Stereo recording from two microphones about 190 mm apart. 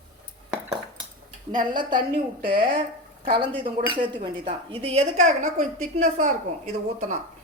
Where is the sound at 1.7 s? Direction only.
25° right (ahead or behind).